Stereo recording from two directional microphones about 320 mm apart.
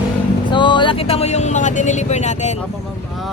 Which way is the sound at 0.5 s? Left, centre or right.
Centre.